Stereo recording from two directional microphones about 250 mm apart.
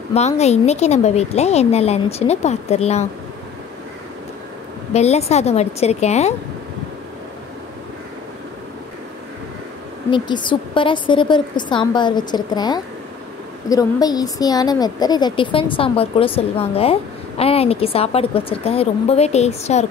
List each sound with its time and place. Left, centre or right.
0.1 s a woman's voice: left
4.9 s a woman's voice: left
10.1 s a woman's voice: centre